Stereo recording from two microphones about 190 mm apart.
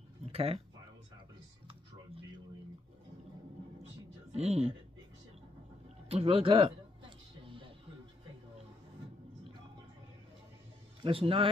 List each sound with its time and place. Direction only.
0.3 s speech: 30° right (ahead or behind)
4.3 s speech: 35° right (ahead or behind)
6.0 s a sound: 30° right (ahead or behind)
11.0 s a man's voice: 30° right (ahead or behind)